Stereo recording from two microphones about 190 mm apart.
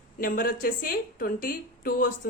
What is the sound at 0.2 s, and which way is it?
A woman's voice, 50° left (ahead or behind).